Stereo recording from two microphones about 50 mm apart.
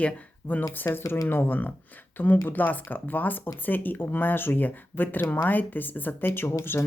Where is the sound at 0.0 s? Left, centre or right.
Left.